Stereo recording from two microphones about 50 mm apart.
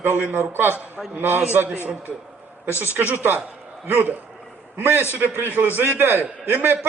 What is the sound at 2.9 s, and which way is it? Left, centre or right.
A man's voice, right.